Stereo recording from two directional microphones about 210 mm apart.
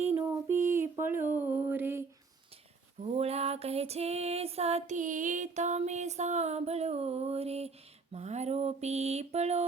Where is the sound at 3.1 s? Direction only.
30° right (ahead or behind).